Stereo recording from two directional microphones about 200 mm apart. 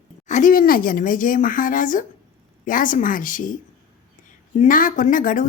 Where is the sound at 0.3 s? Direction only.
40° left (ahead or behind).